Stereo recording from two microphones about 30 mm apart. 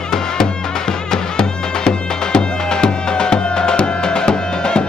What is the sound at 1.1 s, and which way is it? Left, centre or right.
Music, left.